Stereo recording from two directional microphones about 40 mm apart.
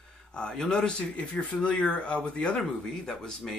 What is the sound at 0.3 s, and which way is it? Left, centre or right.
Speech, left.